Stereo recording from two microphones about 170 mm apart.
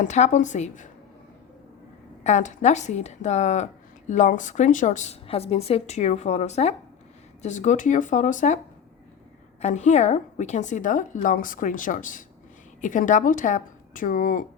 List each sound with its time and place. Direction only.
0.0 s speech: 45° left (ahead or behind)
2.2 s speech: 45° left (ahead or behind)
9.6 s speech: 45° left (ahead or behind)